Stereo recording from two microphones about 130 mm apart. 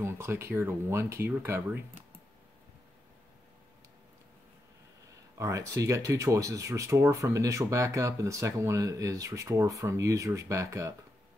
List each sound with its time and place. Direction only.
0.0 s speech: 20° right (ahead or behind)
5.4 s speech: 25° right (ahead or behind)